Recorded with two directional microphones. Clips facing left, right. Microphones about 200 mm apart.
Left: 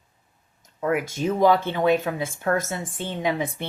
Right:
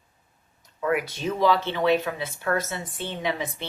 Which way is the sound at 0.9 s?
45° left (ahead or behind).